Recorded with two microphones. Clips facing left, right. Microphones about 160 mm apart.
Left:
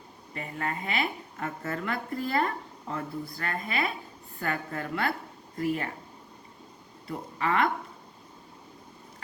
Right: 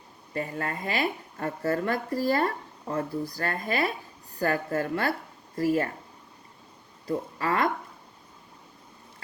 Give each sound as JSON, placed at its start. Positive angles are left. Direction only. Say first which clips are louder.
{"t": 0.3, "sound": "a woman's voice", "louder": "right 3 dB", "side_deg": -40}
{"t": 7.1, "sound": "a woman's voice", "louder": "right 2 dB", "side_deg": -40}